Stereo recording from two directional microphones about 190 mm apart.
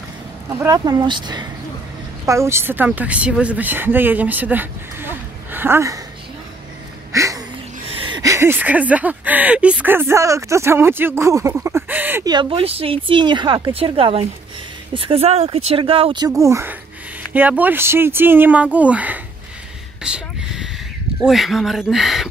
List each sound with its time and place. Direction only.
0.6 s speech: 20° right (ahead or behind)
7.1 s a sound: 15° right (ahead or behind)
7.9 s speech: 25° right (ahead or behind); by 12.3 s 10° right (ahead or behind)
12.3 s speech: 25° right (ahead or behind); by 19.2 s 10° right (ahead or behind)
20.0 s a sound: 5° right (ahead or behind)
21.2 s speech: centre (ahead or behind)